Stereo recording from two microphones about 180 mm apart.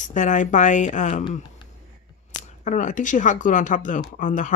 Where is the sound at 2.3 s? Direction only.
45° left (ahead or behind).